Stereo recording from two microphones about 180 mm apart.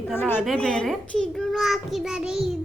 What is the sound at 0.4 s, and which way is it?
A child's voice, centre (ahead or behind).